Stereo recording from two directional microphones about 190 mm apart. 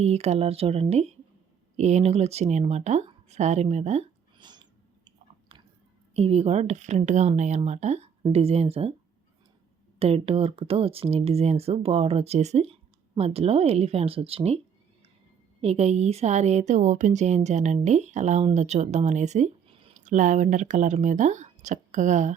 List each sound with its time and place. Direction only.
0.0 s speech: 35° right (ahead or behind)
4.4 s chewing: 25° right (ahead or behind)
6.1 s speech: 30° right (ahead or behind)
10.0 s speech: 30° right (ahead or behind)
15.6 s speech: 35° right (ahead or behind)
20.1 s speech: 40° right (ahead or behind)